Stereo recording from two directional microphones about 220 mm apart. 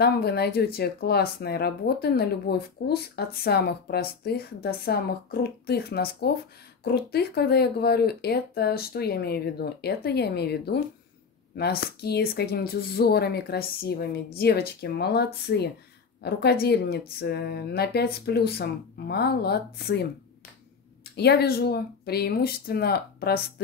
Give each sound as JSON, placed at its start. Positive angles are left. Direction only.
{"t": 0.0, "sound": "speech", "side_deg": 45}